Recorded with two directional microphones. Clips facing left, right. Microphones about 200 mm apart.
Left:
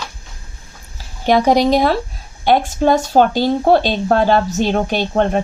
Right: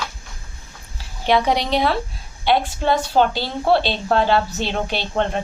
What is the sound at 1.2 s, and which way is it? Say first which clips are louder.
A woman's voice: left 6 dB; 45° left (ahead or behind).